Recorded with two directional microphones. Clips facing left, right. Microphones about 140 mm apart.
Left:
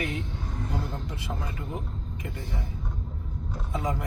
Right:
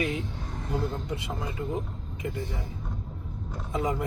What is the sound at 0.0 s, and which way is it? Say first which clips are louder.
Vehicle: right 2 dB; 20° right (ahead or behind).